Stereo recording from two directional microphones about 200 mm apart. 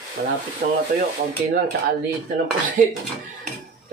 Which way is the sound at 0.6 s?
40° right (ahead or behind).